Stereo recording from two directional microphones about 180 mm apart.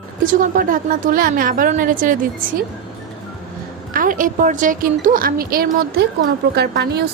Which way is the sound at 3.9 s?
50° right (ahead or behind).